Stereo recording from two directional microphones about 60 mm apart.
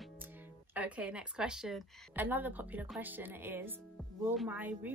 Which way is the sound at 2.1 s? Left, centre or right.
Right.